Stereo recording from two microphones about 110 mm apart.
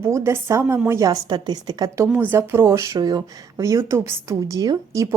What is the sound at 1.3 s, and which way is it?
Speech, 45° right (ahead or behind).